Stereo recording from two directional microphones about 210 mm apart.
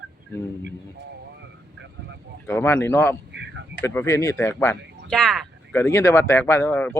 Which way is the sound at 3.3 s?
55° right (ahead or behind).